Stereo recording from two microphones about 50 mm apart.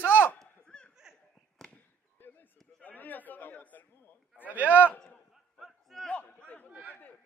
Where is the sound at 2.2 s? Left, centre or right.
Left.